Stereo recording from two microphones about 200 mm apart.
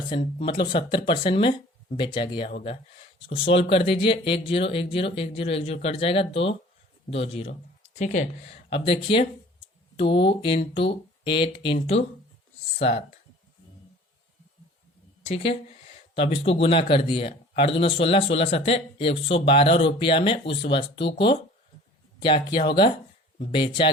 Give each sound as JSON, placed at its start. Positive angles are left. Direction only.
{"t": 0.1, "sound": "speech", "side_deg": 25}
{"t": 15.2, "sound": "a sound", "side_deg": 30}
{"t": 16.6, "sound": "speech", "side_deg": 25}
{"t": 22.2, "sound": "speech", "side_deg": 25}